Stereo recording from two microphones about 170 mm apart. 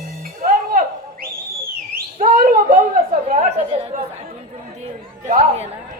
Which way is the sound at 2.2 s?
55° right (ahead or behind).